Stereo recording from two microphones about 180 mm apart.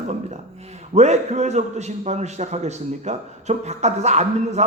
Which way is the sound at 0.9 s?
40° right (ahead or behind).